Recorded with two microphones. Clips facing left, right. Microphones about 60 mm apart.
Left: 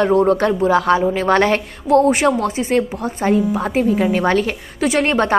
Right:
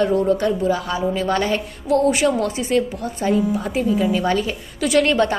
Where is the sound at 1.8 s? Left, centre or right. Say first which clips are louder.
Left 4 dB; left.